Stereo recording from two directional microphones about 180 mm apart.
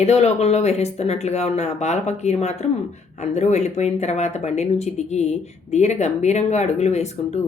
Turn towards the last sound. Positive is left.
turn(degrees=35)  # may be behind; listen again after turning